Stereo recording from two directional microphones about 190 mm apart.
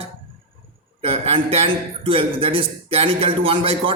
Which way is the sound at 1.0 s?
30° right (ahead or behind).